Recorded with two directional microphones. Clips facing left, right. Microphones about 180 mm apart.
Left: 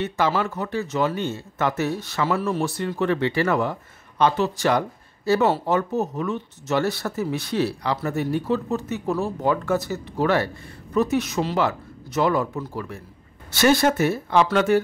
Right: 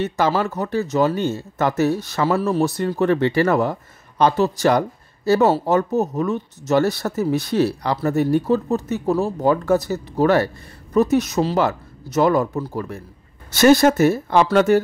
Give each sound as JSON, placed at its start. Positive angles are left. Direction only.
{"t": 0.0, "sound": "speech", "side_deg": -40}